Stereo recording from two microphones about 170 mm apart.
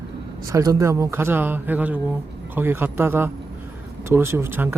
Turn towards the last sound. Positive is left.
turn(degrees=-15)  # may be behind; listen again after turning